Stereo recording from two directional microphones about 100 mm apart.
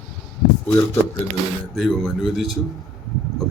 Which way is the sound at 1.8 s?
Centre (ahead or behind).